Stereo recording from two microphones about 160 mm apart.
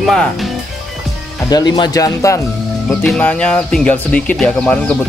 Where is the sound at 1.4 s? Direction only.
25° left (ahead or behind).